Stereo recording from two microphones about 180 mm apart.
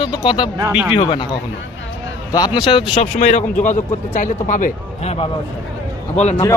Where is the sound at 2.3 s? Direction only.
25° left (ahead or behind).